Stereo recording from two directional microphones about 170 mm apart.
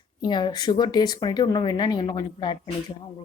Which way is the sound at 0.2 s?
25° left (ahead or behind).